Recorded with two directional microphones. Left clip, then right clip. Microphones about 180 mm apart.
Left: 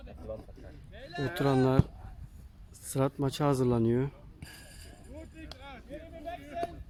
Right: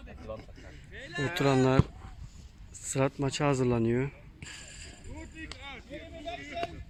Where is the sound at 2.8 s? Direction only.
15° left (ahead or behind).